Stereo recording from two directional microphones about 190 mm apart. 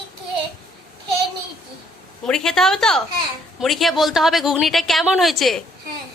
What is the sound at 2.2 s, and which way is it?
A woman's voice, 5° left (ahead or behind).